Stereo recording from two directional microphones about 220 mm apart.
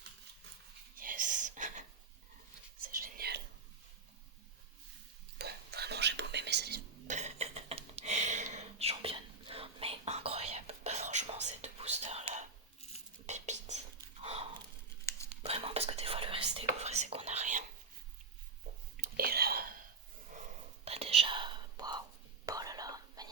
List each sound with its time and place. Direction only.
0.9 s whispering: 40° right (ahead or behind)
2.8 s whispering: 40° right (ahead or behind)
5.4 s whispering: 45° right (ahead or behind)
7.1 s a sound: 30° right (ahead or behind)
13.2 s whispering: 30° right (ahead or behind)
18.9 s whispering: 45° right (ahead or behind)
20.8 s whispering: 30° right (ahead or behind)